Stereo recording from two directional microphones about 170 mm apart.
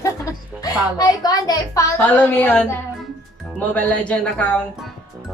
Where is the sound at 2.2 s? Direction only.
10° left (ahead or behind).